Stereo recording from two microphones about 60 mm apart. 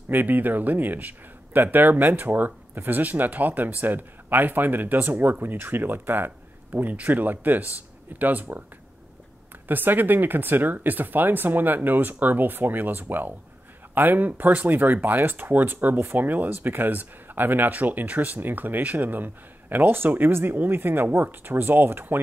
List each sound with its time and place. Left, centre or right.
0.1 s a man's voice: right
9.7 s a man's voice: right